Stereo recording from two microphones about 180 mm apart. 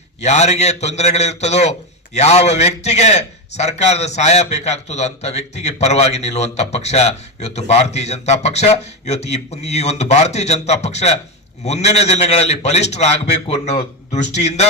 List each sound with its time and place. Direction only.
0.2 s a man's voice: 40° left (ahead or behind)